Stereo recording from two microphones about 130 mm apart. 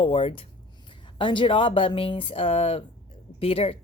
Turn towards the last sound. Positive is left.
turn(degrees=45)  # may be behind; listen again after turning